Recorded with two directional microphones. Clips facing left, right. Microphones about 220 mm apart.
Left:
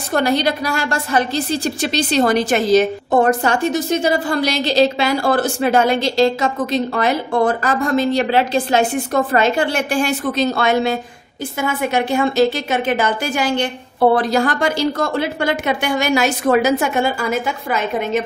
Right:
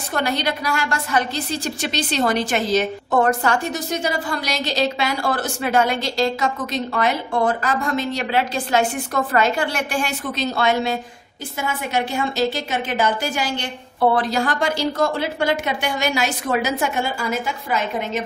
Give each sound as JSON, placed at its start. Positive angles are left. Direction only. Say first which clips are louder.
{"t": 0.1, "sound": "a woman's voice", "louder": "left 6 dB", "side_deg": 35}
{"t": 3.3, "sound": "a woman's voice", "louder": "left 4 dB", "side_deg": 20}